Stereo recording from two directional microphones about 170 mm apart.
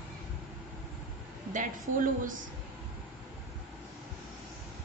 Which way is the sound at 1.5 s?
50° right (ahead or behind).